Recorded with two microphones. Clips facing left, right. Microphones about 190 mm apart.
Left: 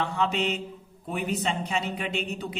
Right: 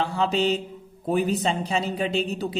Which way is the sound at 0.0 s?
35° right (ahead or behind).